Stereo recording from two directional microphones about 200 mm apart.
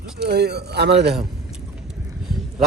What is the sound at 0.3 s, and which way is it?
Speech, 55° right (ahead or behind).